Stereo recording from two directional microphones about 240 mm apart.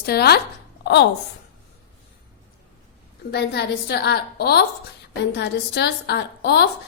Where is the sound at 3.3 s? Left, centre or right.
Left.